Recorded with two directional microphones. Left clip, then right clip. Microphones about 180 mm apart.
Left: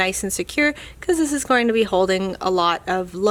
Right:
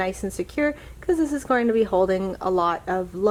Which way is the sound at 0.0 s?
30° left (ahead or behind).